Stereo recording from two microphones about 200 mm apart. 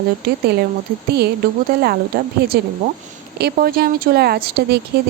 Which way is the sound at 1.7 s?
50° right (ahead or behind).